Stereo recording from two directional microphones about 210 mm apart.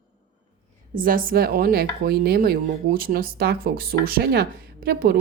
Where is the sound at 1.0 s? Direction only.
40° right (ahead or behind).